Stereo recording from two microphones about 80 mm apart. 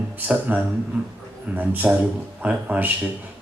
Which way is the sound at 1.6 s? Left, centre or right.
Right.